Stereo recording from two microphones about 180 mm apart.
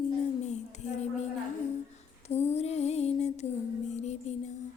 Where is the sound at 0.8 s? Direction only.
40° left (ahead or behind).